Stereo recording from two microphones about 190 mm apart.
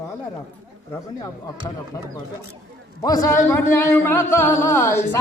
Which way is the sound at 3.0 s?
20° left (ahead or behind).